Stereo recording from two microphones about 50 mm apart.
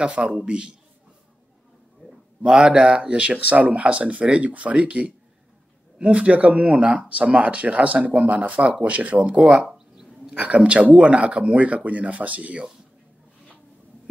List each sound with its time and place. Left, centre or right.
0.0 s speech: right
2.4 s speech: centre
9.7 s a sound: centre
10.3 s speech: right